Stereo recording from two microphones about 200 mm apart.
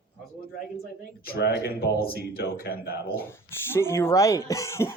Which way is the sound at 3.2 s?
10° left (ahead or behind).